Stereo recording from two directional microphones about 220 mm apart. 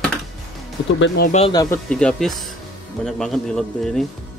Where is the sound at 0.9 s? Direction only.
50° left (ahead or behind).